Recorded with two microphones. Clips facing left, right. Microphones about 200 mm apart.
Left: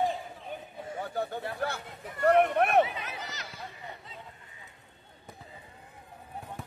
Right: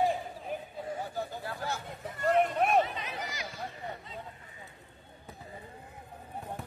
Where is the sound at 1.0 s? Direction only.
60° left (ahead or behind).